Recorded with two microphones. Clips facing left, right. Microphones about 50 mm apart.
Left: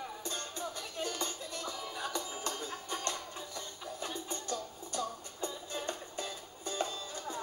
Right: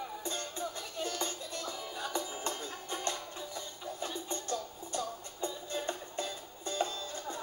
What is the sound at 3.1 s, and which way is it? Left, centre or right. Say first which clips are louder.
Music: right 1 dB; centre.